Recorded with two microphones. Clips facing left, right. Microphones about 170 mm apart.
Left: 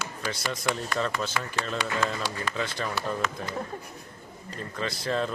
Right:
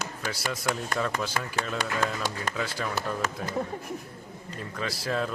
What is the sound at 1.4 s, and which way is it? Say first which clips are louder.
Speech: even; 40° right (ahead or behind).